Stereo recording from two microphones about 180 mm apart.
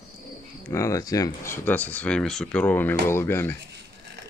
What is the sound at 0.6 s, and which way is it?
Speech, 15° left (ahead or behind).